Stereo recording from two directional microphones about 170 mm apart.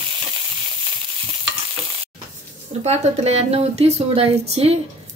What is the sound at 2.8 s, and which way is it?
Speech, 40° right (ahead or behind).